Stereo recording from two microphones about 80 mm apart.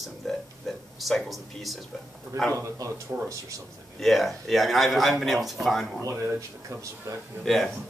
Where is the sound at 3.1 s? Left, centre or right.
Right.